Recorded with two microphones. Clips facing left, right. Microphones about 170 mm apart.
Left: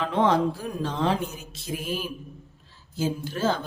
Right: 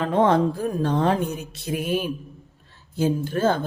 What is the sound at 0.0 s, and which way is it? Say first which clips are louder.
A woman's voice: right 3 dB; 50° right (ahead or behind).